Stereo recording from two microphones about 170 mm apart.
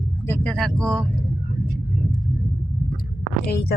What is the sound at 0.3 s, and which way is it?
Speech, 5° left (ahead or behind).